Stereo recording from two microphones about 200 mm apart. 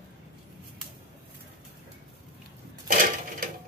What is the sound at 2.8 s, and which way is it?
Crushing, 45° right (ahead or behind).